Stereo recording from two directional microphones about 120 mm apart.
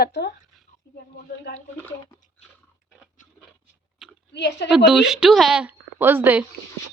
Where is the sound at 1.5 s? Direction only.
15° left (ahead or behind).